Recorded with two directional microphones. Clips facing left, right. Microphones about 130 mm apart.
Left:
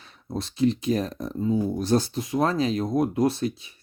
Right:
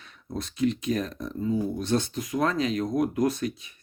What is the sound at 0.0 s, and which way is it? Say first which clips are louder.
Speech: left 3 dB; 30° left (ahead or behind).